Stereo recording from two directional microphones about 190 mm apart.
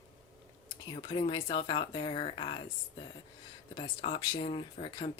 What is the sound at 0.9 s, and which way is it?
Speech, 25° left (ahead or behind).